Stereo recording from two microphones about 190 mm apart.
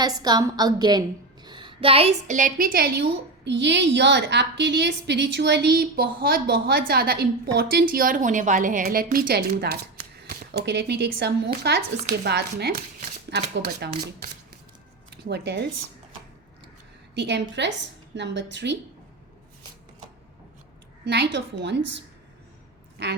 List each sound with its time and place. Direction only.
0.0 s a woman's voice: 20° right (ahead or behind); by 14.0 s 55° right (ahead or behind)
15.1 s speech: 60° right (ahead or behind)
17.2 s a woman's voice: 65° right (ahead or behind)
21.0 s a woman's voice: 60° right (ahead or behind)